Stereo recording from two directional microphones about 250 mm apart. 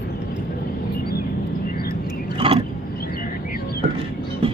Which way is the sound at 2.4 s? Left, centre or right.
Right.